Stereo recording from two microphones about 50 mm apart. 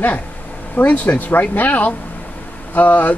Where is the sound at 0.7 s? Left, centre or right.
Left.